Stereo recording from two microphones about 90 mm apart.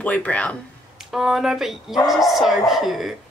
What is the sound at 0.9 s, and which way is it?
Speech, 5° right (ahead or behind).